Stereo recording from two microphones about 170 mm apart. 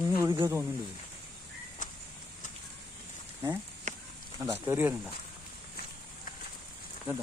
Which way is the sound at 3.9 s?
45° right (ahead or behind).